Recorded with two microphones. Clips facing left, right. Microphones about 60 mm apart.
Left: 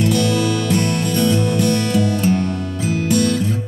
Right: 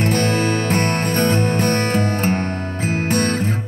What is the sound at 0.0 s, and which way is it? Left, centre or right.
Music, right.